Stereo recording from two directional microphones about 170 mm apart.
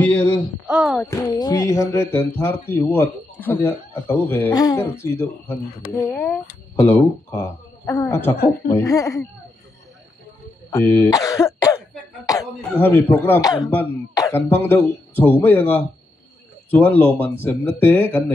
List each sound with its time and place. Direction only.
0.0 s a sound: 5° left (ahead or behind)
0.7 s speech: 5° right (ahead or behind)
0.9 s speech: 15° left (ahead or behind)
10.7 s speech: 15° left (ahead or behind)